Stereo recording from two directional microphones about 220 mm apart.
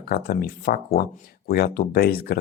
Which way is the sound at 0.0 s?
45° left (ahead or behind).